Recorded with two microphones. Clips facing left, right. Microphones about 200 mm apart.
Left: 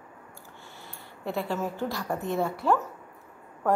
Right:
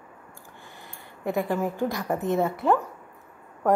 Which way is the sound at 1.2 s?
15° right (ahead or behind).